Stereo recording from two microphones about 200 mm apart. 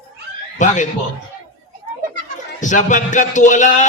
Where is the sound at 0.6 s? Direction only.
40° left (ahead or behind).